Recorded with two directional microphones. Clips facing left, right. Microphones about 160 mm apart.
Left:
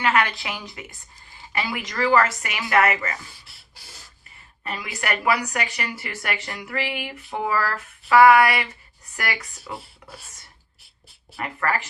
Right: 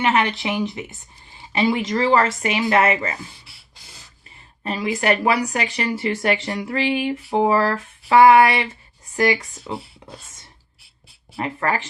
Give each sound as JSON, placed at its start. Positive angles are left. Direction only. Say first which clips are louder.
{"t": 0.0, "sound": "speech", "louder": "right 3 dB", "side_deg": -20}
{"t": 4.6, "sound": "speech", "louder": "right 9 dB", "side_deg": -30}
{"t": 11.3, "sound": "speech", "louder": "right 3 dB", "side_deg": -25}